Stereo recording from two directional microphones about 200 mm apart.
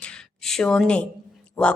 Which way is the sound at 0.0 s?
5° left (ahead or behind).